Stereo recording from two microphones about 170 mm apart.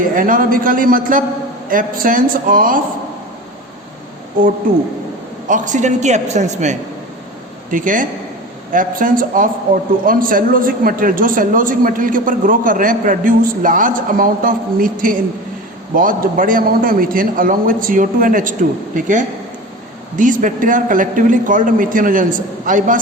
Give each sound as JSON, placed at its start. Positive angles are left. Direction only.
{"t": 0.2, "sound": "a man's voice", "side_deg": -55}
{"t": 5.5, "sound": "a man's voice", "side_deg": -50}